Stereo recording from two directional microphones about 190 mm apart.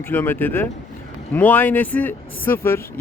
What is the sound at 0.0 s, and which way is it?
Speech, 10° left (ahead or behind).